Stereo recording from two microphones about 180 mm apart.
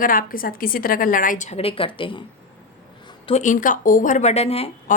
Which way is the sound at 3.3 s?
40° left (ahead or behind).